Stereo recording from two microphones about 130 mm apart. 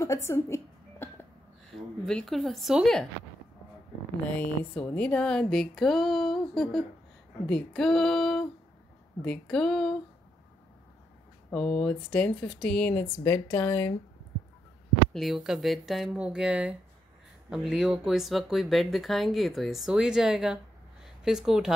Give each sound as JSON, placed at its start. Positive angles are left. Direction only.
{"t": 0.0, "sound": "a sound", "side_deg": 20}
{"t": 1.7, "sound": "speech", "side_deg": 5}
{"t": 4.3, "sound": "speech", "side_deg": 10}
{"t": 11.8, "sound": "speech", "side_deg": 5}
{"t": 15.1, "sound": "speech", "side_deg": 0}